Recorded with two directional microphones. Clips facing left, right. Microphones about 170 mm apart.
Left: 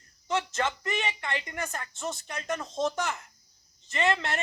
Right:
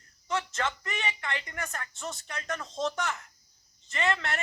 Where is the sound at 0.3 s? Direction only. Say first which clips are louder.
Left 2 dB; 20° left (ahead or behind).